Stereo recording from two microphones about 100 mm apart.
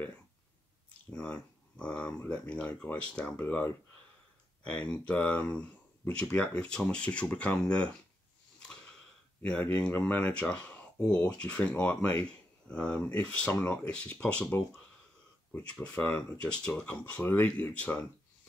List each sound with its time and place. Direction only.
1.1 s speech: 10° left (ahead or behind)
4.6 s speech: 10° left (ahead or behind)
9.4 s speech: 15° left (ahead or behind)
15.5 s speech: 10° left (ahead or behind)